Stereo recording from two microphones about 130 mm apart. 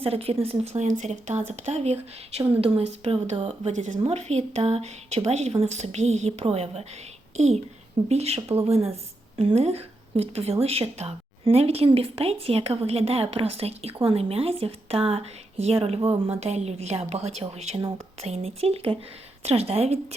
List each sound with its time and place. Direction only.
0.0 s speech: 50° right (ahead or behind); by 1.4 s 70° right (ahead or behind)
1.5 s a woman's voice: 55° right (ahead or behind)
3.8 s a woman's voice: 70° right (ahead or behind); by 20.1 s 55° right (ahead or behind)